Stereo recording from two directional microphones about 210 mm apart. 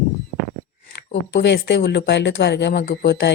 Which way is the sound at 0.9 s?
55° left (ahead or behind).